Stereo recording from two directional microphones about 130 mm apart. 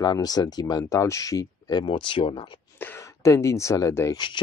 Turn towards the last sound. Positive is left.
turn(degrees=25)  # may be behind; listen again after turning